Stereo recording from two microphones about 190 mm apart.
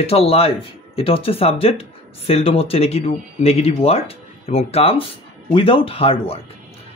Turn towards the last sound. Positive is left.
turn(degrees=30)  # may be behind; listen again after turning